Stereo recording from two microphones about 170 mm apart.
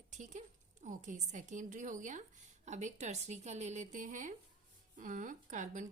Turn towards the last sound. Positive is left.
turn(degrees=-45)  # may be behind; listen again after turning